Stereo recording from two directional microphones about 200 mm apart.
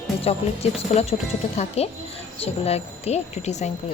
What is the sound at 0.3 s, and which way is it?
A woman's voice, 30° left (ahead or behind).